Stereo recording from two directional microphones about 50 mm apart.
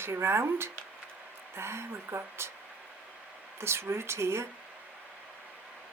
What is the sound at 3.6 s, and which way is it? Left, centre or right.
Speech, right.